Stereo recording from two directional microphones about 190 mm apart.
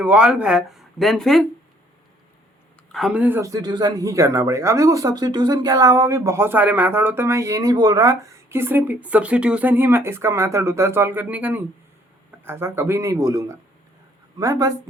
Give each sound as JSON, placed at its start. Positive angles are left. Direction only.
{"t": 0.0, "sound": "speech", "side_deg": -5}
{"t": 2.9, "sound": "speech", "side_deg": -5}